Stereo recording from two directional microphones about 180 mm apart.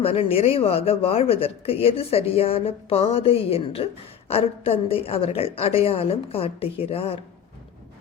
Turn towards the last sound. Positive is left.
turn(degrees=30)  # may be behind; listen again after turning